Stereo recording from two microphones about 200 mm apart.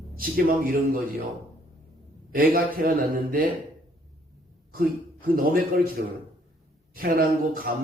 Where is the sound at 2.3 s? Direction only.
45° right (ahead or behind).